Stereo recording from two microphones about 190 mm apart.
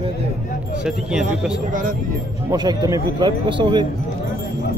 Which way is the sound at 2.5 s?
20° right (ahead or behind).